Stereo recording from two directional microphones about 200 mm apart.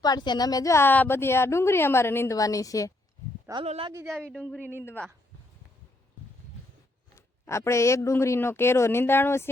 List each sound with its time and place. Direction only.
0.0 s a woman's voice: 20° left (ahead or behind)
3.5 s speech: 30° right (ahead or behind)
4.0 s speech: centre (ahead or behind)
4.6 s speech: 10° right (ahead or behind)
4.9 s speech: 5° left (ahead or behind)
7.4 s a woman's voice: 15° left (ahead or behind)